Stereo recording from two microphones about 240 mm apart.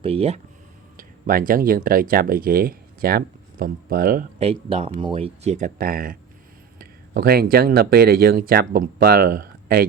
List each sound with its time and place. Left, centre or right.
0.0 s speech: right
0.9 s speech: right